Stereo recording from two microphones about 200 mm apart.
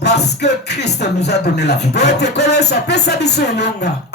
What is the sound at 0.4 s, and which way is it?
Speech, 55° left (ahead or behind).